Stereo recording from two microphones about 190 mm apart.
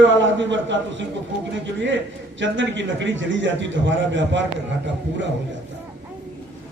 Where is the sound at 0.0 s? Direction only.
75° right (ahead or behind).